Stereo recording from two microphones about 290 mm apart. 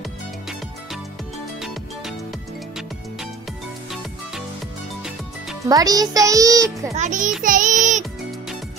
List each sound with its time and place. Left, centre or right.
1.6 s music: centre
5.7 s a child's voice: centre
7.0 s a child's voice: right
7.4 s music: right